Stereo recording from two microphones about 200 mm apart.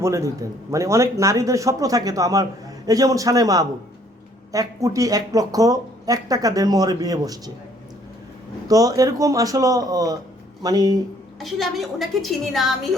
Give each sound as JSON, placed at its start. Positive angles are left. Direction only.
{"t": 0.0, "sound": "speech", "side_deg": -15}
{"t": 8.6, "sound": "speech", "side_deg": -15}
{"t": 11.3, "sound": "a woman's voice", "side_deg": 0}